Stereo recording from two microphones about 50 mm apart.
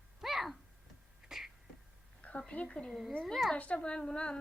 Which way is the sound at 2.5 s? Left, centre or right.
Left.